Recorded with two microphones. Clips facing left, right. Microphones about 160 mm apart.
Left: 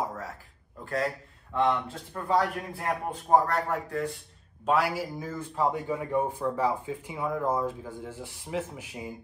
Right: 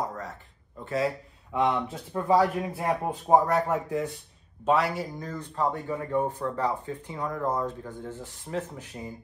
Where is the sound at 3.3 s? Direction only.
20° right (ahead or behind).